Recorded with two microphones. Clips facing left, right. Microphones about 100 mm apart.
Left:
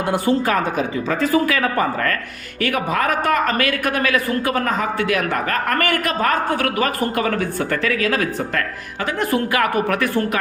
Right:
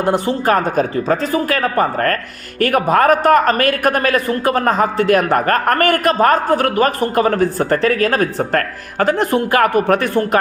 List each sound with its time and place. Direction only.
0.0 s a man's voice: 40° right (ahead or behind)
9.1 s a man's voice: 30° right (ahead or behind)